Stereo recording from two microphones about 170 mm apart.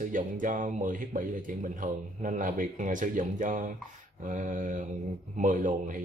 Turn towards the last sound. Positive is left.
turn(degrees=-50)  # may be behind; listen again after turning